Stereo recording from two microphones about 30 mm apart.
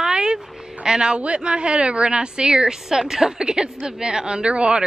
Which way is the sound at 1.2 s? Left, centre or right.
Right.